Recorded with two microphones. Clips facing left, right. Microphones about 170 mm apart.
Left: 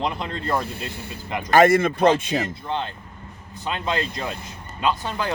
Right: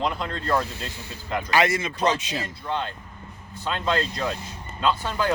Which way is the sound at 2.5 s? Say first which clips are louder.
Left 1 dB; 25° left (ahead or behind).